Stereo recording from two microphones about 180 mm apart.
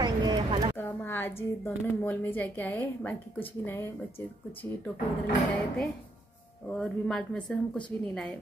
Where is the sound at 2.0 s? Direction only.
10° left (ahead or behind).